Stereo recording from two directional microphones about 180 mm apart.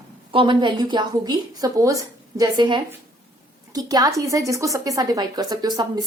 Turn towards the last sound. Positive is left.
turn(degrees=-20)  # may be behind; listen again after turning